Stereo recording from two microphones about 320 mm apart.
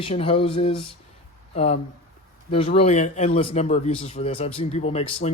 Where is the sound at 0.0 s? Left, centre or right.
Centre.